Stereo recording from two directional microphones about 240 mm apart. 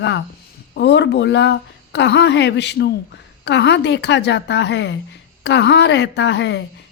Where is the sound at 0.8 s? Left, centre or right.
Left.